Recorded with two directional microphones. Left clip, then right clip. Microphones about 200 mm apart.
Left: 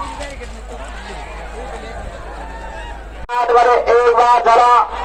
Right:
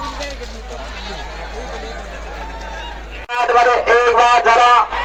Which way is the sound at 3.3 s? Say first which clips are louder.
Left 1 dB; 50° left (ahead or behind).